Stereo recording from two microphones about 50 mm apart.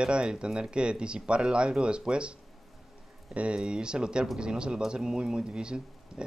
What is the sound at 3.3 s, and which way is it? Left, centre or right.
Speech, right.